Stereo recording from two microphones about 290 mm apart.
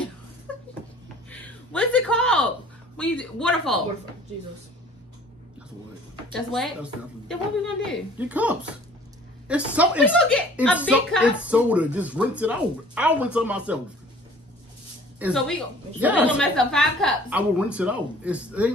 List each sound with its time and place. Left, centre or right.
0.5 s a sound: centre
1.3 s a woman's voice: centre
6.3 s a woman's voice: centre
15.1 s a woman's voice: centre